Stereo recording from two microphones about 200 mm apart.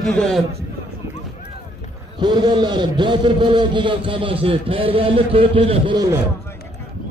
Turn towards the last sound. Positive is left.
turn(degrees=-20)  # may be behind; listen again after turning